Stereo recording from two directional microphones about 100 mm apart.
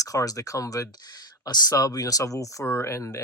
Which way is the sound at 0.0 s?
35° left (ahead or behind).